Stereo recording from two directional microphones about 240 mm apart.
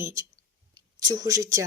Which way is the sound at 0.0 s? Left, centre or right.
Centre.